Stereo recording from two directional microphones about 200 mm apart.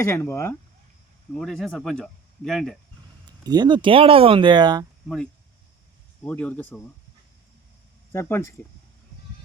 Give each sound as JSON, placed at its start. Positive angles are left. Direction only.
{"t": 0.0, "sound": "speech", "side_deg": 15}
{"t": 1.3, "sound": "speech", "side_deg": 0}
{"t": 3.4, "sound": "speech", "side_deg": -20}
{"t": 5.0, "sound": "speech", "side_deg": 0}
{"t": 8.1, "sound": "speech", "side_deg": 15}